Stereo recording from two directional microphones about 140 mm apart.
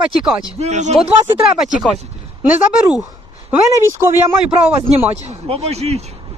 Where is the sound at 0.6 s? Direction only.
55° right (ahead or behind).